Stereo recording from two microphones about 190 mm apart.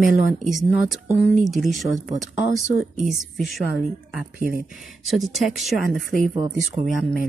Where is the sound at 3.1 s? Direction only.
Centre (ahead or behind).